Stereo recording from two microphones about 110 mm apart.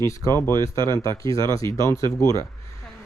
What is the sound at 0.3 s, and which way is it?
Speech, 25° left (ahead or behind).